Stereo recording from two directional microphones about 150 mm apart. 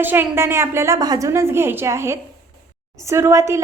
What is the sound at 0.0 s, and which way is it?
A woman's voice, 15° right (ahead or behind).